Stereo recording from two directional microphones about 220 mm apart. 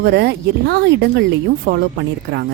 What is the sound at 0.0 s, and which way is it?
Speech, 50° right (ahead or behind).